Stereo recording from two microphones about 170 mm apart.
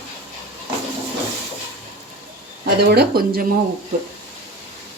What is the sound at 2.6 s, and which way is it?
Speech, 70° right (ahead or behind).